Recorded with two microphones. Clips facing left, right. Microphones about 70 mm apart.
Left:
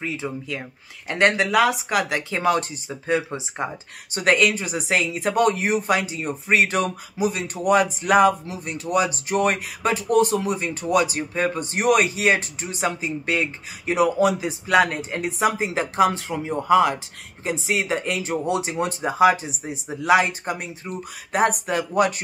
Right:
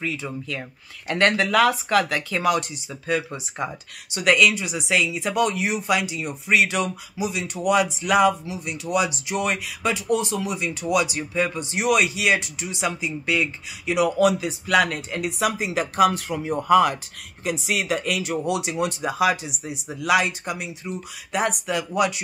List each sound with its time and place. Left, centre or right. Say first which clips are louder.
0.0 s speech: left 1 dB; left
4.1 s speech: even; left